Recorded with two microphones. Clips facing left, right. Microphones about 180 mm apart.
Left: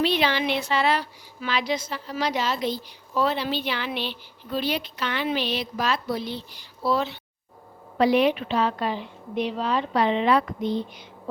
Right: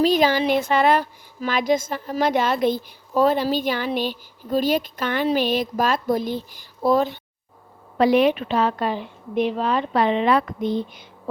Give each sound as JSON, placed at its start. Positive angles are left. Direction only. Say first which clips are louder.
{"t": 0.0, "sound": "a woman's voice", "louder": "right 5 dB", "side_deg": -40}